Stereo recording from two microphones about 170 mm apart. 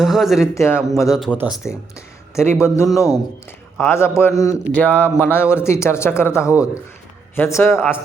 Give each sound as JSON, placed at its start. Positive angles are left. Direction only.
{"t": 0.0, "sound": "speech", "side_deg": 0}
{"t": 0.5, "sound": "speech", "side_deg": 15}
{"t": 1.2, "sound": "speech", "side_deg": -5}
{"t": 2.3, "sound": "speech", "side_deg": 15}